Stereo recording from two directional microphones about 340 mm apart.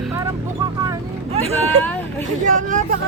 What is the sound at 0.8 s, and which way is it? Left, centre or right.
Vehicle, centre.